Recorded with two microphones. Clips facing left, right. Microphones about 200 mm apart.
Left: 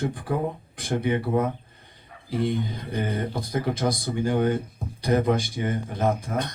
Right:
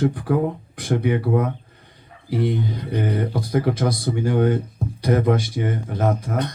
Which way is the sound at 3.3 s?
65° right (ahead or behind).